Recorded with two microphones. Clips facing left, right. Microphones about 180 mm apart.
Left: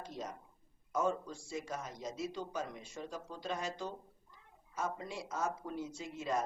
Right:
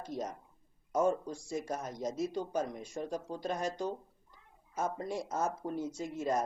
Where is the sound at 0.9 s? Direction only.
45° right (ahead or behind).